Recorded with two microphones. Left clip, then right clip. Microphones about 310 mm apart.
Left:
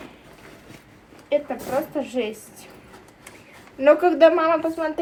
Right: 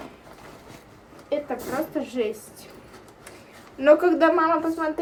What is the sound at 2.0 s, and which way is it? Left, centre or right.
Speech, centre.